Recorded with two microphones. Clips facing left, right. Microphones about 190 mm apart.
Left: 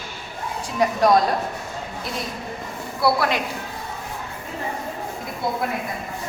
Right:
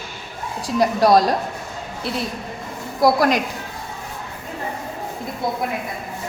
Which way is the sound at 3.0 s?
40° right (ahead or behind).